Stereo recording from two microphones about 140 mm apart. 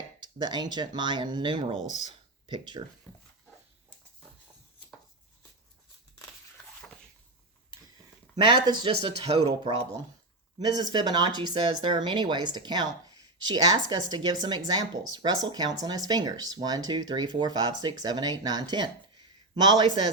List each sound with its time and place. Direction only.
0.2 s speech: 30° right (ahead or behind)
8.4 s speech: 30° right (ahead or behind)
8.9 s speech: 45° right (ahead or behind)
10.6 s speech: 30° right (ahead or behind)